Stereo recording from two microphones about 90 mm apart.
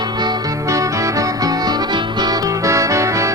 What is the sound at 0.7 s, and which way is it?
Music, 35° right (ahead or behind).